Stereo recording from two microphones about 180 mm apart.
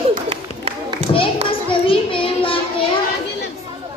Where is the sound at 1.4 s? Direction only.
30° left (ahead or behind).